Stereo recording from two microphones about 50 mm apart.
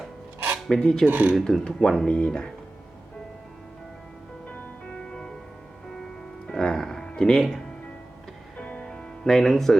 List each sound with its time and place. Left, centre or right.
0.7 s speech: centre
1.0 s speech: right
1.5 s speech: centre
4.4 s music: left
5.0 s music: centre
6.5 s music: centre
7.2 s speech: centre
8.5 s music: left
8.9 s music: centre